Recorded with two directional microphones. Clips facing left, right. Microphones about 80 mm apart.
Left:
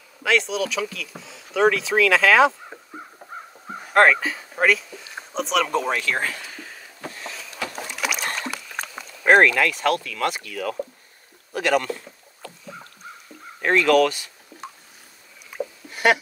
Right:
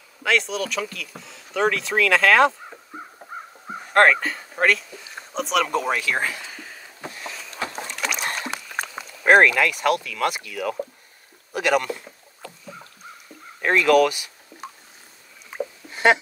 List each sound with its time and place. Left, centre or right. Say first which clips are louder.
0.2 s speech: left 1 dB; centre
2.9 s crow: right 2 dB; centre
6.5 s a sound: even; centre
7.8 s rowboat: left 3 dB; centre
8.5 s rowboat: right 2 dB; right
8.8 s speech: even; centre
11.5 s rowboat: even; centre
13.6 s speech: even; centre
15.9 s a sound: right 1 dB; right